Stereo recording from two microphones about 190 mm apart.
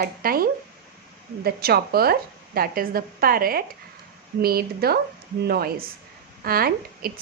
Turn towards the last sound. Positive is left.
turn(degrees=-50)  # may be behind; listen again after turning